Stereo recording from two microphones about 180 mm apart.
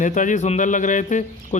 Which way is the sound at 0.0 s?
45° left (ahead or behind).